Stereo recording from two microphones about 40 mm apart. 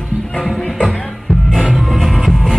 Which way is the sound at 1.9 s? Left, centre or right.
Centre.